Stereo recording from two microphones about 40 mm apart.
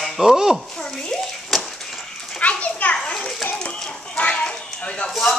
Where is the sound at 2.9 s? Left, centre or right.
Centre.